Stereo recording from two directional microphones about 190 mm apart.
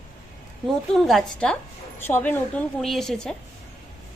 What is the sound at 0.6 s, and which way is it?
A woman's voice, centre (ahead or behind).